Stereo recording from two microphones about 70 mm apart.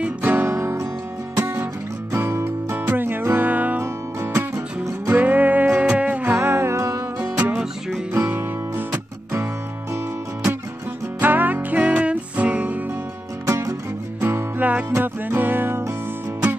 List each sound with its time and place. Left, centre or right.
0.2 s music: right
4.2 s music: right
5.1 s music: right
7.3 s music: right
8.1 s music: right
11.1 s music: right
13.5 s music: right
14.2 s music: right